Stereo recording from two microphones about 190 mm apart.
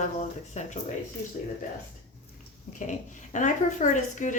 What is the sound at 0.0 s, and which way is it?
Speech, 40° left (ahead or behind).